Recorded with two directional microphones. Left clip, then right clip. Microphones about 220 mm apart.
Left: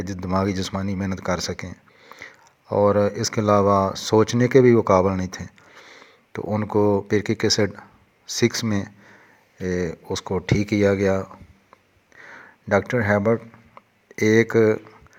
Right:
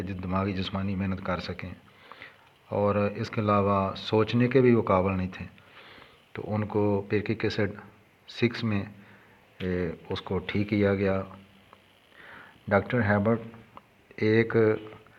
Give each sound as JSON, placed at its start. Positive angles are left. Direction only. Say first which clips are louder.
{"t": 0.2, "sound": "speech", "louder": "left 7 dB", "side_deg": 35}
{"t": 12.2, "sound": "a sound", "louder": "left 5 dB", "side_deg": 30}
{"t": 14.3, "sound": "speech", "louder": "left 6 dB", "side_deg": 35}